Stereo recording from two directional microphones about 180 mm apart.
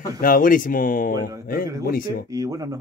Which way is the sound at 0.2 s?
50° left (ahead or behind).